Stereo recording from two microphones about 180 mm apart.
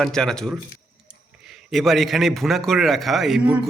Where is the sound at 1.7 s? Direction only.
Centre (ahead or behind).